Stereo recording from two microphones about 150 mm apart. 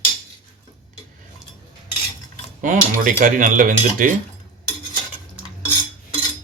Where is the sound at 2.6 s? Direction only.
60° right (ahead or behind).